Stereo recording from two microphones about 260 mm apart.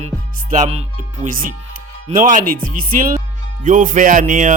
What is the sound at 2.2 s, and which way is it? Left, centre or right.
Speech, right.